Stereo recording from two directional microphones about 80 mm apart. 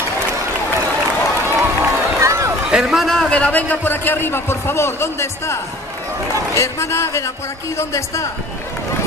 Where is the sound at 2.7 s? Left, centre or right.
Centre; by 8.2 s left.